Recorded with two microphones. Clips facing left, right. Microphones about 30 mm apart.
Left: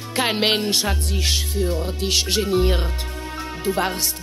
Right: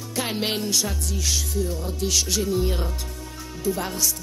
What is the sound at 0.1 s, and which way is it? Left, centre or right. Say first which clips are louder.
Speech: left 7 dB; left.